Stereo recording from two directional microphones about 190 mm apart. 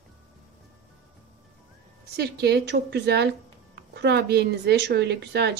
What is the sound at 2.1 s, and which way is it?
A woman's voice, 60° right (ahead or behind).